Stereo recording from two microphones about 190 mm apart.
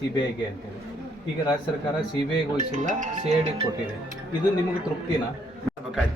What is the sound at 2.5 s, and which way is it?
Speech, 40° right (ahead or behind).